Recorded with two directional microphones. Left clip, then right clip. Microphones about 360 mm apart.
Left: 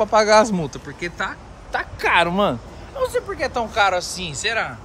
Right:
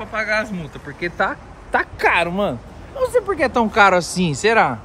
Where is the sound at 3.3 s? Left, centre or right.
Right.